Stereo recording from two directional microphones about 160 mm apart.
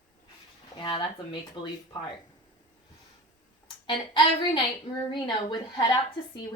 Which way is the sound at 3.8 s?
30° left (ahead or behind).